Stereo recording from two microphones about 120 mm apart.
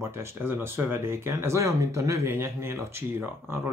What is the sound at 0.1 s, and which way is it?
Speech, 20° right (ahead or behind).